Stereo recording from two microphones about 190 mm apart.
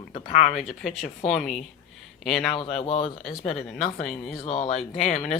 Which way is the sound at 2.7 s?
30° left (ahead or behind).